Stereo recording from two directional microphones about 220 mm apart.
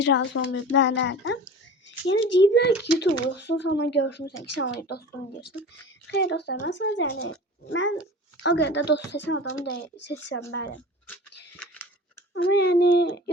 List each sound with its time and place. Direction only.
0.0 s speech: 55° left (ahead or behind)
4.4 s speech: 75° left (ahead or behind)
4.8 s speech: 45° left (ahead or behind)
6.1 s speech: 50° left (ahead or behind)
11.5 s scissors: 5° left (ahead or behind)
12.3 s speech: 50° left (ahead or behind)